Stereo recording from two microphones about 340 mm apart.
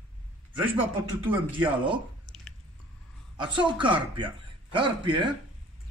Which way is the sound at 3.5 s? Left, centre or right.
Centre.